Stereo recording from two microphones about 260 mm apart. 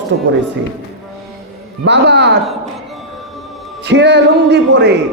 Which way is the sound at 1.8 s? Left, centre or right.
Right.